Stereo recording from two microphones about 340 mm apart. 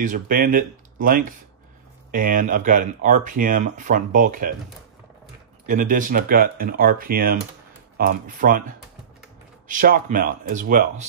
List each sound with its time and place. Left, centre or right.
0.0 s speech: right
5.7 s speech: right
9.7 s speech: right